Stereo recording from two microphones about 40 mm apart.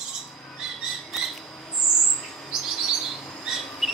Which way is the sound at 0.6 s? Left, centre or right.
Centre.